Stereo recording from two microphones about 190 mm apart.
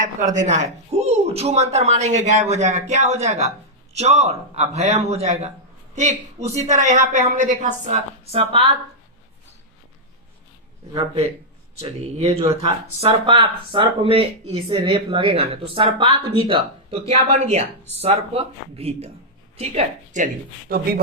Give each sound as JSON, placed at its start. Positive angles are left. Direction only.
{"t": 0.0, "sound": "a woman's voice", "side_deg": -40}
{"t": 10.9, "sound": "a woman's voice", "side_deg": -30}